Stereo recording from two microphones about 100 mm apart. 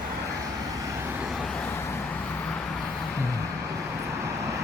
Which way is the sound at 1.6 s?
25° left (ahead or behind).